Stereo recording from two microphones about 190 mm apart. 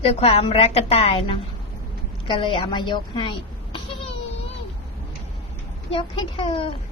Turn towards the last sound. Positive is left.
turn(degrees=30)  # may be behind; listen again after turning